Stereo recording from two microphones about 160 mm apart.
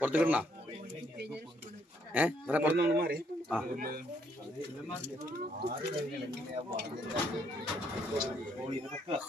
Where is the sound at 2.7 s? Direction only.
80° right.